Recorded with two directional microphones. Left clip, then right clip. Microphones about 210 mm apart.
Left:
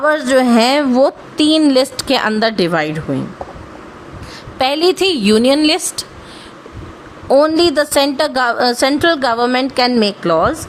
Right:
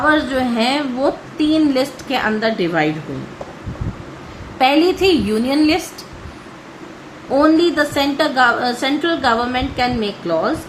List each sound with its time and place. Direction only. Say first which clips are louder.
0.0 s a woman's voice: left 3 dB; 55° left (ahead or behind)
4.5 s a woman's voice: even; 55° left (ahead or behind)
7.3 s a woman's voice: left 2 dB; 55° left (ahead or behind)